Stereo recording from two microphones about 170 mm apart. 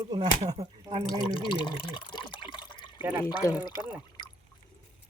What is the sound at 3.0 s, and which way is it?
Speech, 15° right (ahead or behind).